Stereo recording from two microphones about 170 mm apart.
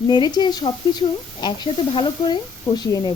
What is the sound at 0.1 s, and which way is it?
A woman's voice, 25° left (ahead or behind).